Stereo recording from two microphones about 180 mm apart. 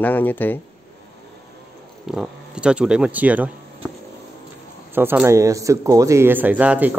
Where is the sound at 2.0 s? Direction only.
5° right (ahead or behind).